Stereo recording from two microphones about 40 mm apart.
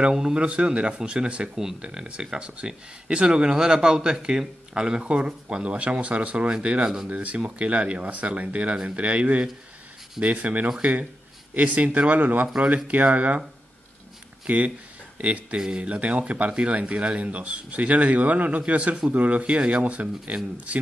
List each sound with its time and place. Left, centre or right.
0.1 s speech: centre
7.1 s speech: right
14.5 s speech: right